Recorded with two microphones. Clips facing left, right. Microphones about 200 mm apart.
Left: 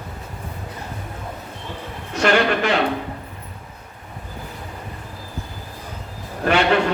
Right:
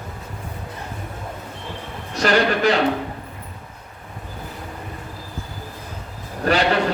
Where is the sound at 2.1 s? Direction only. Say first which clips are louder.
Even; 35° right (ahead or behind).